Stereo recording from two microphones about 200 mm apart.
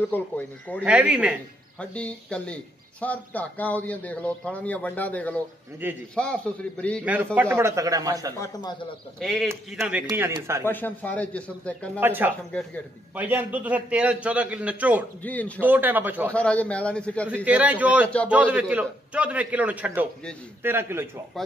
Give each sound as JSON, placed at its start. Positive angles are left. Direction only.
{"t": 0.1, "sound": "speech", "side_deg": 10}
{"t": 0.8, "sound": "speech", "side_deg": -5}
{"t": 1.8, "sound": "speech", "side_deg": 5}
{"t": 5.8, "sound": "a man's voice", "side_deg": -10}
{"t": 6.5, "sound": "speech", "side_deg": 5}
{"t": 7.3, "sound": "a man's voice", "side_deg": -10}
{"t": 8.4, "sound": "a man's voice", "side_deg": 20}
{"t": 9.2, "sound": "a man's voice", "side_deg": 0}
{"t": 10.6, "sound": "speech", "side_deg": 10}
{"t": 12.0, "sound": "a man's voice", "side_deg": -10}
{"t": 15.2, "sound": "speech", "side_deg": 5}
{"t": 15.6, "sound": "a man's voice", "side_deg": -10}
{"t": 16.3, "sound": "speech", "side_deg": 5}
{"t": 17.5, "sound": "a man's voice", "side_deg": -5}